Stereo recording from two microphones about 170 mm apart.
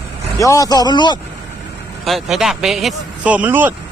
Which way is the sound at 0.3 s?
20° left (ahead or behind).